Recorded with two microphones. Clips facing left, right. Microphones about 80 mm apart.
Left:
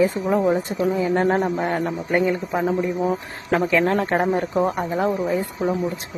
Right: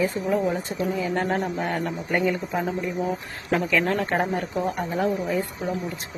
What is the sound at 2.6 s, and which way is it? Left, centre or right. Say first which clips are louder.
A man's voice: left 5 dB; left.